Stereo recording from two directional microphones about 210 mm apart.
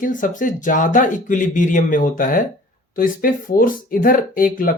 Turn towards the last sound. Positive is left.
turn(degrees=40)  # may be behind; listen again after turning